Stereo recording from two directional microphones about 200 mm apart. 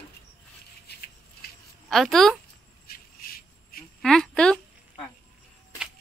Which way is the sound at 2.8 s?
45° left (ahead or behind).